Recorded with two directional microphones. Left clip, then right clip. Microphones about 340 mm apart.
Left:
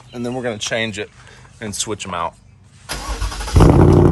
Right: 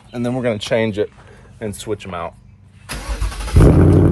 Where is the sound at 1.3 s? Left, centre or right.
Centre.